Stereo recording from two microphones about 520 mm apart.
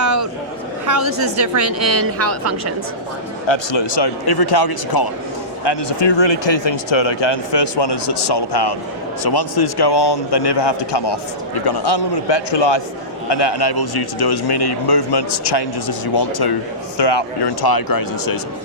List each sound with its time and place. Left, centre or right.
0.0 s a sound: right
0.9 s a woman's voice: right
3.4 s speech: left